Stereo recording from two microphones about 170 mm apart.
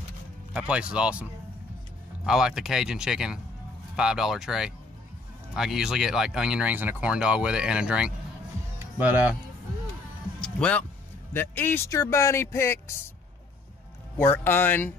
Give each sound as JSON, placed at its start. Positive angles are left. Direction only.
{"t": 0.5, "sound": "speech", "side_deg": -5}
{"t": 2.2, "sound": "speech", "side_deg": -5}
{"t": 8.7, "sound": "music", "side_deg": -10}
{"t": 10.4, "sound": "music", "side_deg": 5}
{"t": 11.3, "sound": "speech", "side_deg": 10}
{"t": 14.1, "sound": "speech", "side_deg": 10}